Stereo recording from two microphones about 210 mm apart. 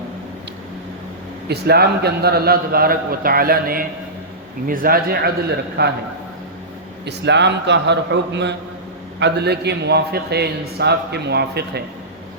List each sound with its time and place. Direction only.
1.5 s a man's voice: 50° right (ahead or behind)
7.0 s a man's voice: 55° right (ahead or behind)